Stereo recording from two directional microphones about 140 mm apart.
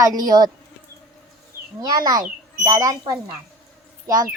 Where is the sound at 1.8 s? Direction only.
25° right (ahead or behind).